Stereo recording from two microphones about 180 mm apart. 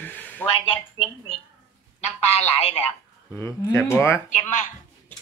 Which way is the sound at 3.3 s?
15° left (ahead or behind).